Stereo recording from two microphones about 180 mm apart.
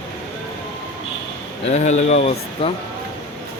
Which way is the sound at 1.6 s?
40° left (ahead or behind).